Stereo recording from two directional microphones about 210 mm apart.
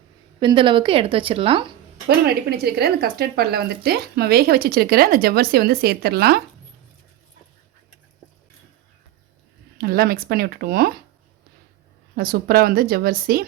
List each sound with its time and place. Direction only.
0.3 s a woman's voice: 20° right (ahead or behind)
2.0 s speech: 50° right (ahead or behind)
9.7 s speech: 45° right (ahead or behind)
12.1 s speech: 45° right (ahead or behind)